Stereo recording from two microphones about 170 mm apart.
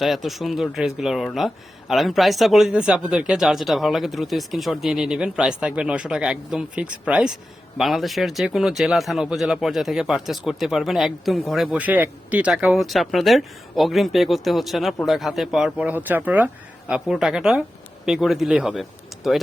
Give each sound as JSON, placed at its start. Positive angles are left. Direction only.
{"t": 0.0, "sound": "speech", "side_deg": 0}